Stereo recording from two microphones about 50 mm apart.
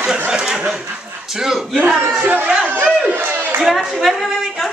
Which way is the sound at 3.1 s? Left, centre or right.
Right.